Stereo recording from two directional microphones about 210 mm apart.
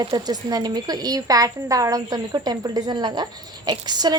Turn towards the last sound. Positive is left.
turn(degrees=-20)  # may be behind; listen again after turning